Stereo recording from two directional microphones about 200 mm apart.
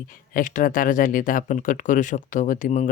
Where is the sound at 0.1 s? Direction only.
45° left (ahead or behind).